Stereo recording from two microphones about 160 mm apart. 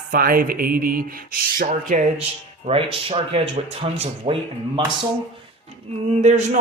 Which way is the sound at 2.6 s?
35° right (ahead or behind).